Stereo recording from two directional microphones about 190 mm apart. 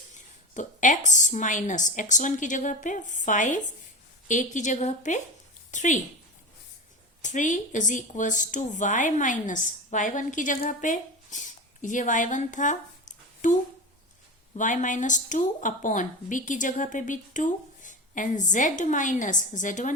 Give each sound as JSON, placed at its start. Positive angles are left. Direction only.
{"t": 0.1, "sound": "a woman's voice", "side_deg": 40}
{"t": 7.2, "sound": "a woman's voice", "side_deg": 40}